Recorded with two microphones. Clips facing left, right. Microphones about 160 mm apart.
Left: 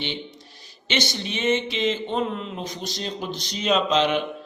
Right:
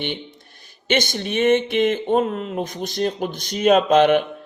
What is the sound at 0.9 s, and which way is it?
A man's voice, 50° right (ahead or behind).